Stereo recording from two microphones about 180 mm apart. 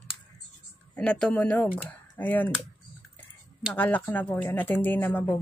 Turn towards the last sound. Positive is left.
turn(degrees=10)  # may be behind; listen again after turning